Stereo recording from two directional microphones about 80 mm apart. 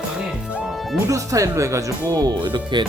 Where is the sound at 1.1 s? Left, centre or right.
Right.